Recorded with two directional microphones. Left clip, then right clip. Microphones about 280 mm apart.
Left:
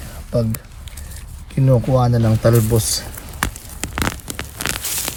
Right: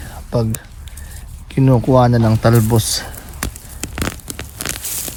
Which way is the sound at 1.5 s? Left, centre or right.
Centre.